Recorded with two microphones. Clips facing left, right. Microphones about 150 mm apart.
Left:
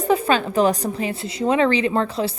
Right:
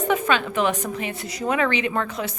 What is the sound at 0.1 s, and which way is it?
A woman's voice, 35° left (ahead or behind).